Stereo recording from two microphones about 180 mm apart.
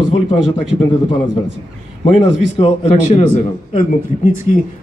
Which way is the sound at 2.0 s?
35° left (ahead or behind).